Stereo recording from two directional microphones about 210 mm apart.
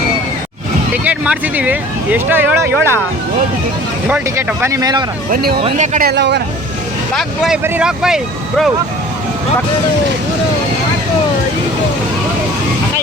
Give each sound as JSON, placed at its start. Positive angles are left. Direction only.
{"t": 1.0, "sound": "speech", "side_deg": -5}
{"t": 4.1, "sound": "speech", "side_deg": -10}
{"t": 5.3, "sound": "speech", "side_deg": -45}
{"t": 5.6, "sound": "speech", "side_deg": -35}
{"t": 7.1, "sound": "speech", "side_deg": 0}